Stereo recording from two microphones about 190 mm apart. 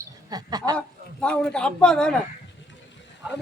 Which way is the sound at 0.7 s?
5° left (ahead or behind).